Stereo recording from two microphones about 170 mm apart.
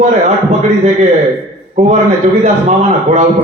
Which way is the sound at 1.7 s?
40° right (ahead or behind).